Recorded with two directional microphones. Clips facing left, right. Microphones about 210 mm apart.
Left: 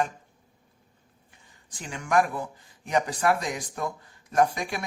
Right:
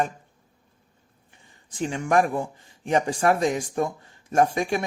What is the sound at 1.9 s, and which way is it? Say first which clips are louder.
Speech: right 3 dB; 25° right (ahead or behind).